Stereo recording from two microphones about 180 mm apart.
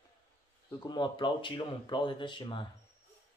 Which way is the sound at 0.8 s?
25° left (ahead or behind).